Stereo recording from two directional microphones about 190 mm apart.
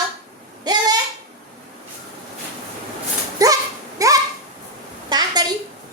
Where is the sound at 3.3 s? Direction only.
20° right (ahead or behind).